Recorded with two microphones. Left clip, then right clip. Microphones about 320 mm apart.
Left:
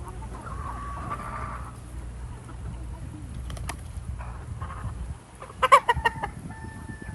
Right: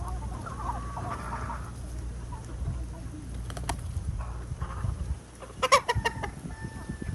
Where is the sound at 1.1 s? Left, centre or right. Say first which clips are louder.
Left 3 dB; left.